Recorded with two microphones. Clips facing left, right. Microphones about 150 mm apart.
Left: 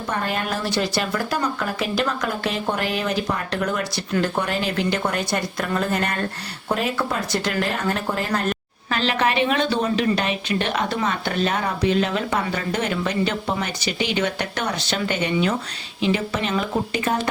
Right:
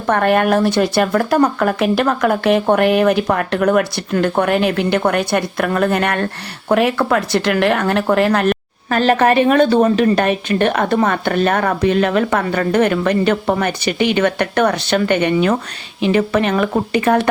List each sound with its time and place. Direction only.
0.1 s a woman's voice: 60° right (ahead or behind)
8.9 s a woman's voice: 50° right (ahead or behind)